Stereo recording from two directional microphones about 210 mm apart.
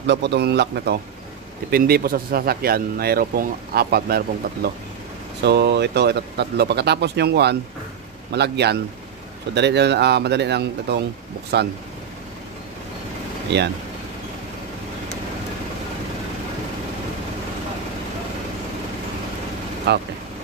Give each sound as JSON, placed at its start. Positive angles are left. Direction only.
{"t": 0.0, "sound": "speech", "side_deg": -55}
{"t": 13.5, "sound": "speech", "side_deg": -55}
{"t": 19.9, "sound": "speech", "side_deg": -55}